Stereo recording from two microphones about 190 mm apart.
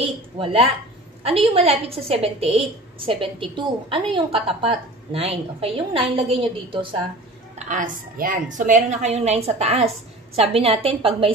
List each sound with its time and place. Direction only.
0.0 s a woman's voice: 30° right (ahead or behind)
7.5 s a woman's voice: 40° right (ahead or behind)